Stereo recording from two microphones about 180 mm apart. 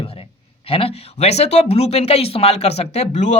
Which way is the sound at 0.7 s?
30° left (ahead or behind).